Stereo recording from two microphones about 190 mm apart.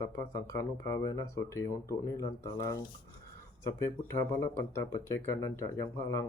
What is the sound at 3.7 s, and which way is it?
Speech, 15° left (ahead or behind).